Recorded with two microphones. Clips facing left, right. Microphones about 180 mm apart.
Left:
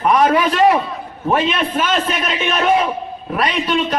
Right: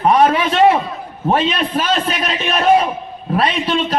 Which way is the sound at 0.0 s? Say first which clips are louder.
Right 1 dB; 30° right (ahead or behind).